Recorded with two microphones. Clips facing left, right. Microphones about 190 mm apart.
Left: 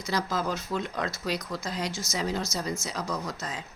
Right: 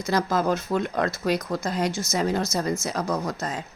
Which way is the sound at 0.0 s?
50° right (ahead or behind).